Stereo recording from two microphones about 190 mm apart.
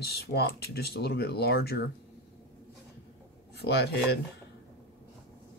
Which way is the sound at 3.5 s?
60° left (ahead or behind).